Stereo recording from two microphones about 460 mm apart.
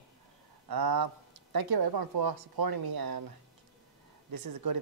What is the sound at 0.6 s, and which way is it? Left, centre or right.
Speech, right.